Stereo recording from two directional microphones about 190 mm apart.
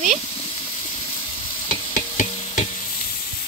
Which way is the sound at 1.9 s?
45° left (ahead or behind).